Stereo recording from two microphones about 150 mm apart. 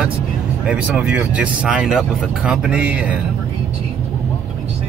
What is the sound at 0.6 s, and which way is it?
Speech, 5° right (ahead or behind).